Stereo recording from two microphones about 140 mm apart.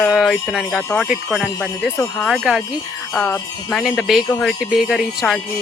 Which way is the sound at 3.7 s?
Centre (ahead or behind).